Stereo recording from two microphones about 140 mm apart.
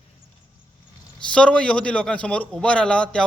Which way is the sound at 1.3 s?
5° left (ahead or behind).